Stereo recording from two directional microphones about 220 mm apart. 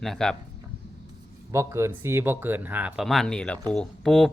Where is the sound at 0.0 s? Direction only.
Centre (ahead or behind).